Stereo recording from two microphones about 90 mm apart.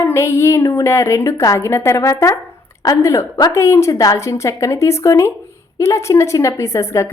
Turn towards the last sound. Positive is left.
turn(degrees=30)  # may be behind; listen again after turning